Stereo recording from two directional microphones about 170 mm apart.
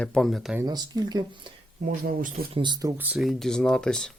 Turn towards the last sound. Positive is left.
turn(degrees=5)  # may be behind; listen again after turning